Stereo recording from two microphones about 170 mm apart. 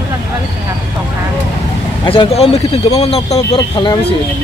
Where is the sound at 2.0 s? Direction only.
35° left (ahead or behind).